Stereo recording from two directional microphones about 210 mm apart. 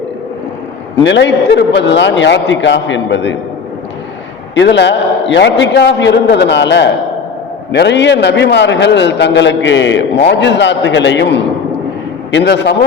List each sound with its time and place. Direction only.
1.0 s a man's voice: 55° left (ahead or behind)
4.5 s a man's voice: 55° left (ahead or behind)